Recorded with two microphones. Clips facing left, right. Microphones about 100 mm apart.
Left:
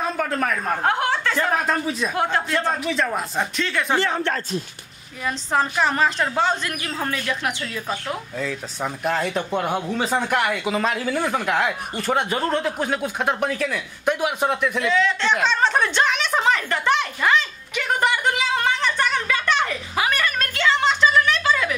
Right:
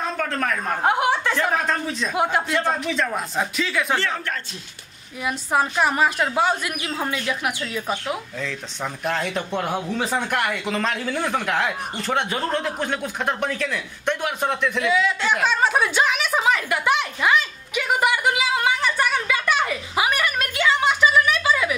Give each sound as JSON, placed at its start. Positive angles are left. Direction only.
{"t": 0.0, "sound": "a woman's voice", "side_deg": 5}
{"t": 0.8, "sound": "chuckle", "side_deg": -15}
{"t": 1.5, "sound": "speech", "side_deg": 5}
{"t": 2.3, "sound": "a woman's voice", "side_deg": -10}
{"t": 2.7, "sound": "speech", "side_deg": 0}
{"t": 4.1, "sound": "speech", "side_deg": 35}
{"t": 5.2, "sound": "a woman's voice", "side_deg": -10}
{"t": 8.4, "sound": "speech", "side_deg": 5}
{"t": 14.9, "sound": "a woman's voice", "side_deg": -10}
{"t": 15.4, "sound": "a sound", "side_deg": -10}